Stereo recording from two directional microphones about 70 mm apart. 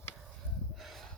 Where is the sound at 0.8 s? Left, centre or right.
Centre.